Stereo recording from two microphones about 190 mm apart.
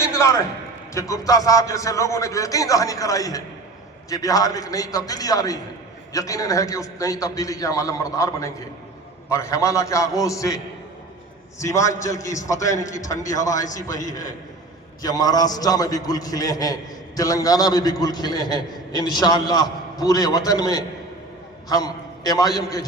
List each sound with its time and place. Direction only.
0.0 s a sound: 15° left (ahead or behind)
0.9 s a man's voice: 15° left (ahead or behind)
11.6 s a man's voice: 15° left (ahead or behind)